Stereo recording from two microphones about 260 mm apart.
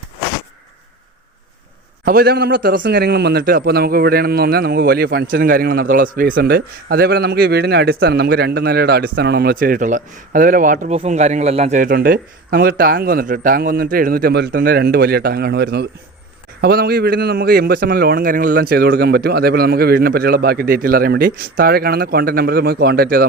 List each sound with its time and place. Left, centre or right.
2.0 s a man's voice: right